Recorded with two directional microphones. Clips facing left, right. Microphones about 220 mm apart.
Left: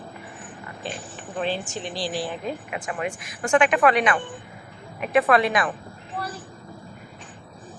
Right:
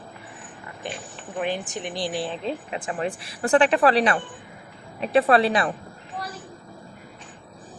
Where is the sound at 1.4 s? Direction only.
15° right (ahead or behind); by 5.7 s 30° right (ahead or behind).